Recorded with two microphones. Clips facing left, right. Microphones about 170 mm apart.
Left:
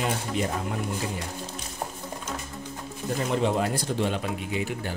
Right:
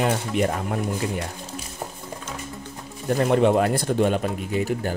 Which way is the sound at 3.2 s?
60° right (ahead or behind).